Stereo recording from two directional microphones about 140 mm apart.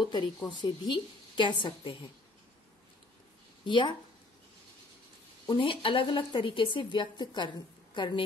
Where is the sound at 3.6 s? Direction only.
35° left (ahead or behind).